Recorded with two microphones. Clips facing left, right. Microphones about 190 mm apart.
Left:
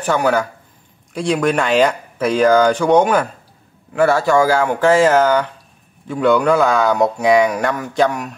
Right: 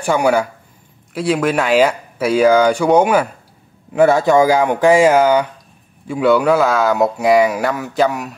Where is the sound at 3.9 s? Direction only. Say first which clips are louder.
Right 3 dB; 20° right (ahead or behind).